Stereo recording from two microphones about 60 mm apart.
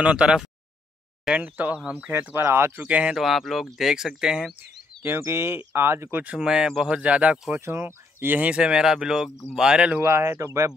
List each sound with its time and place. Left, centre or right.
0.0 s speech: centre
1.4 s speech: right
2.8 s speech: right
3.2 s speech: centre
5.0 s speech: right
6.3 s speech: centre
7.6 s speech: right
8.4 s speech: right
8.8 s speech: centre
9.9 s speech: right